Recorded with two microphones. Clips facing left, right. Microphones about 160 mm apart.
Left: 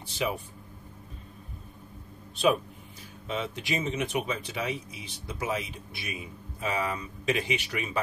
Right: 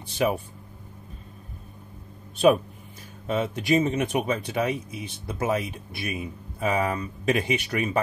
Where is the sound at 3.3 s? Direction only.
50° right (ahead or behind).